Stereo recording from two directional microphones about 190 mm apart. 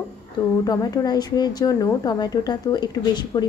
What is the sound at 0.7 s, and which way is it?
Speech, 20° left (ahead or behind).